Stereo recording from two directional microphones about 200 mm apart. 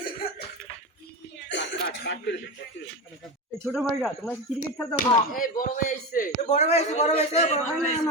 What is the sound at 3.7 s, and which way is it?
Speech, centre (ahead or behind).